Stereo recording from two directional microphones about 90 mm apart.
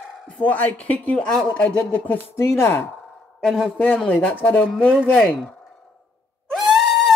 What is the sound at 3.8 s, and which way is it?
Speech, 15° left (ahead or behind).